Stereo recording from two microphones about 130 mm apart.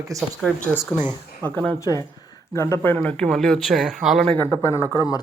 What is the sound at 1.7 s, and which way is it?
Speech, 25° left (ahead or behind).